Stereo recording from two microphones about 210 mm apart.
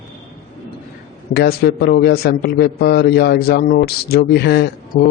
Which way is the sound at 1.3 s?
50° left (ahead or behind).